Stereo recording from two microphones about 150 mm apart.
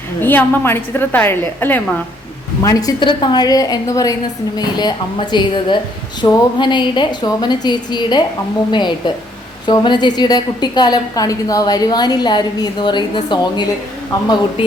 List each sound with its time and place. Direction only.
0.2 s a woman's voice: 15° left (ahead or behind)
3.0 s a woman's voice: 30° left (ahead or behind)